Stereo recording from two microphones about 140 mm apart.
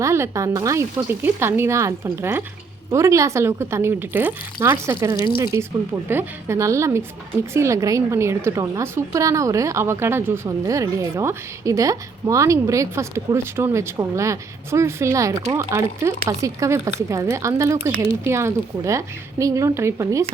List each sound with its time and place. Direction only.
0.0 s a woman's voice: 20° right (ahead or behind)